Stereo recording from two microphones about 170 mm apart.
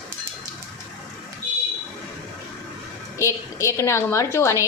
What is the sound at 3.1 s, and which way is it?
A woman's voice, 15° left (ahead or behind).